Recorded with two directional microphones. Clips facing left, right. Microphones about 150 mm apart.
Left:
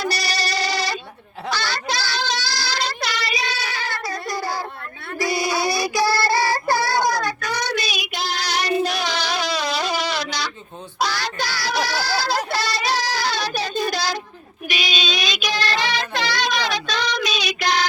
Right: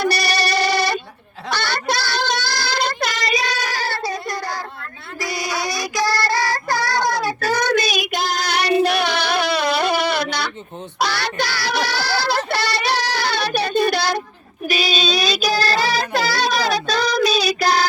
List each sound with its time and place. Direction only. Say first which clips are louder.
0.0 s music: right 5 dB; 60° right (ahead or behind)
1.5 s child singing: right 3 dB; 60° right (ahead or behind); by 4.1 s 30° right (ahead or behind)
5.8 s child singing: left 1 dB; 10° left (ahead or behind)
7.3 s child singing: right 6 dB; 40° right (ahead or behind)
7.6 s child singing: right 6 dB; 50° right (ahead or behind)
11.0 s music: right 2 dB; 65° right (ahead or behind)
12.5 s child singing: right 2 dB; 65° right (ahead or behind)
14.7 s child singing: right 5 dB; 40° right (ahead or behind)